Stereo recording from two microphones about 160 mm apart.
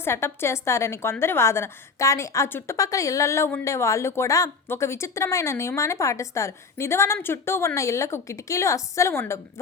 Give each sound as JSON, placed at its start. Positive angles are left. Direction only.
{"t": 0.0, "sound": "a woman's voice", "side_deg": 15}